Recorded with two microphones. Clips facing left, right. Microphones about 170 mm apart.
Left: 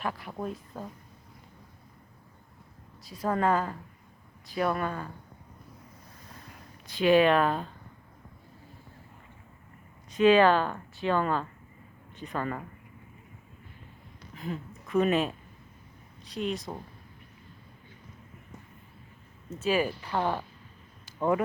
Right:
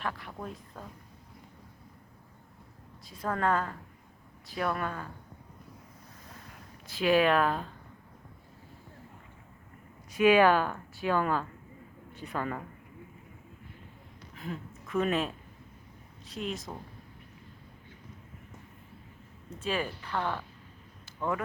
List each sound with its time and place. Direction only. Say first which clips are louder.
0.0 s speech: left 2 dB; 10° left (ahead or behind)
0.3 s a woman's voice: left 6 dB; 20° left (ahead or behind)
3.2 s speech: left 3 dB; 5° left (ahead or behind)
6.8 s speech: left 3 dB; 5° right (ahead or behind)
10.1 s a woman's voice: left 2 dB; 10° right (ahead or behind)
14.3 s a woman's voice: left 3 dB; centre (ahead or behind)
19.5 s speech: left 6 dB; 5° left (ahead or behind); by 21.4 s 20° left (ahead or behind)